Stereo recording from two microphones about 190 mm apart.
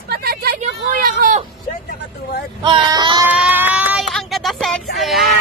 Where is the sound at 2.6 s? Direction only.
25° right (ahead or behind).